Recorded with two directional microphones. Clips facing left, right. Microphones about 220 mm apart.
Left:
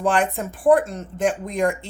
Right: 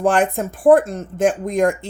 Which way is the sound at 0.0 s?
45° right (ahead or behind).